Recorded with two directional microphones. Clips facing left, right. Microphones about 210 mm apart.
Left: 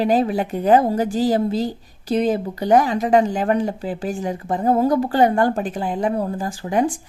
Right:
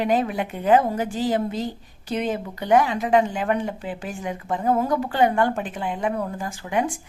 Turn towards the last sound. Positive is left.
turn(degrees=35)  # may be behind; listen again after turning